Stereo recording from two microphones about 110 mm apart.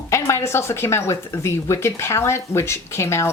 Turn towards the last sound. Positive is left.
turn(degrees=25)  # may be behind; listen again after turning